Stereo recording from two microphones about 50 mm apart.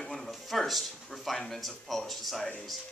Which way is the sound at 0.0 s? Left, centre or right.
Centre.